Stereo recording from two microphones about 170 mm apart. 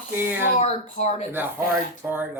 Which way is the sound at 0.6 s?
40° left (ahead or behind).